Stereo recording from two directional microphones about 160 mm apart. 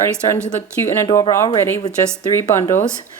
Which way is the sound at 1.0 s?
20° left (ahead or behind).